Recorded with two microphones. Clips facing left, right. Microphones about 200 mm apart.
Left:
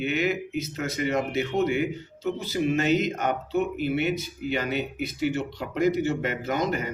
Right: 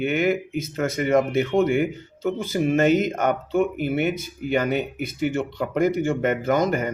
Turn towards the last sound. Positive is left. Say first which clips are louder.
# right 6 dB
turn(degrees=-50)  # may be behind; listen again after turning